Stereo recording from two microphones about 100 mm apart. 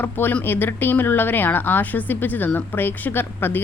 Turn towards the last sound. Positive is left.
turn(degrees=20)  # may be behind; listen again after turning